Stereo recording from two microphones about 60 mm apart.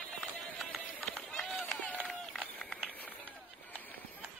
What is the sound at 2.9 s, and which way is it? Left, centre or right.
Run, left.